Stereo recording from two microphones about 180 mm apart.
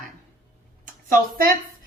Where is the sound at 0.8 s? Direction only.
50° right (ahead or behind).